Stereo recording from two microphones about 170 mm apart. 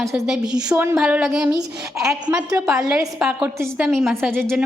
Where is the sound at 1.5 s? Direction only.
20° right (ahead or behind).